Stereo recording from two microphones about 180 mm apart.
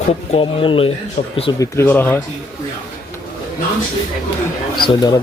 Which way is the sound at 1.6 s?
10° left (ahead or behind).